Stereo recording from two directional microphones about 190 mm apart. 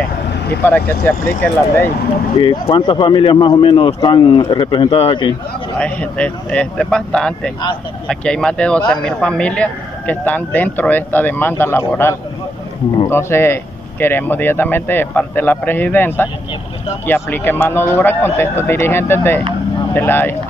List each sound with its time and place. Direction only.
0.7 s speech: 10° left (ahead or behind)
2.3 s speech: 25° left (ahead or behind)
5.8 s speech: 5° left (ahead or behind)